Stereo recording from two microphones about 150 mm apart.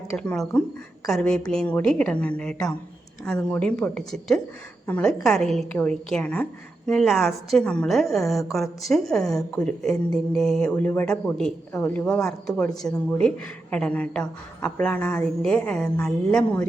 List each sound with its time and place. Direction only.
0.2 s a woman's voice: 5° left (ahead or behind)